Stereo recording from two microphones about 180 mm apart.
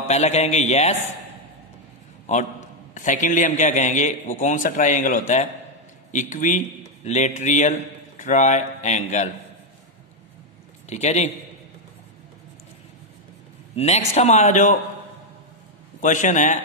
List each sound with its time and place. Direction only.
0.1 s a man's voice: 40° left (ahead or behind)
2.9 s a man's voice: 45° left (ahead or behind)
10.9 s a man's voice: 40° left (ahead or behind)
13.7 s a man's voice: 40° left (ahead or behind)
16.0 s a man's voice: 45° left (ahead or behind)